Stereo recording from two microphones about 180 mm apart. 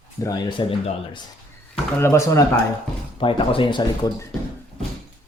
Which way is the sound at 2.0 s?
15° left (ahead or behind).